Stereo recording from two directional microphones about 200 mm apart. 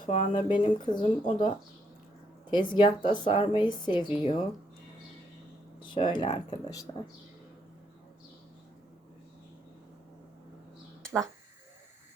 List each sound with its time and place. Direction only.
0.0 s speech: 30° left (ahead or behind)
2.5 s speech: 25° left (ahead or behind)
5.8 s speech: 25° left (ahead or behind)